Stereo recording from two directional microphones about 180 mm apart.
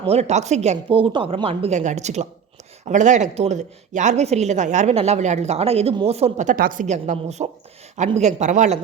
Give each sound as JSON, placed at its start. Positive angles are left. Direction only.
{"t": 0.1, "sound": "speech", "side_deg": -40}